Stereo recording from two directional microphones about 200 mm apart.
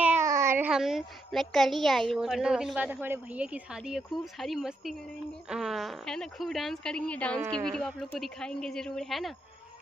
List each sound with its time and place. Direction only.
0.0 s a child's voice: 10° right (ahead or behind); by 7.4 s 5° left (ahead or behind)
7.4 s a woman's voice: 20° right (ahead or behind)
7.7 s a child's voice: centre (ahead or behind)